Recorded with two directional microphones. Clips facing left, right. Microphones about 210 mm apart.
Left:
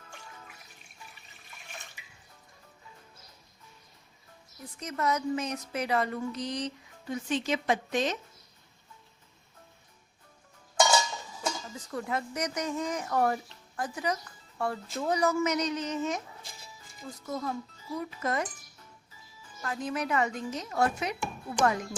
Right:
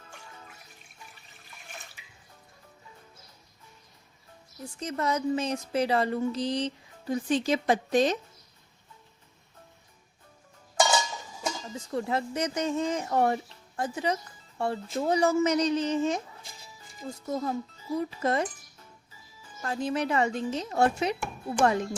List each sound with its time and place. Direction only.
4.6 s a woman's voice: 30° right (ahead or behind)
11.4 s speech: 25° right (ahead or behind)
17.2 s speech: 30° right (ahead or behind)
19.6 s speech: 30° right (ahead or behind)